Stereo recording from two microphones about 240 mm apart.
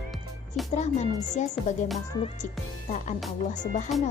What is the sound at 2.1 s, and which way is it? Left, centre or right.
Music, centre.